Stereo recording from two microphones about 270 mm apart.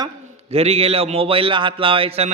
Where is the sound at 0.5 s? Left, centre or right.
Right.